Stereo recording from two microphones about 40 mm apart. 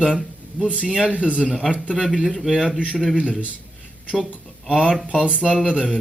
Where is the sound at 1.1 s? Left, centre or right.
Right.